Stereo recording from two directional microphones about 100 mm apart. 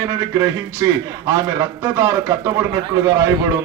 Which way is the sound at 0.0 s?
25° right (ahead or behind).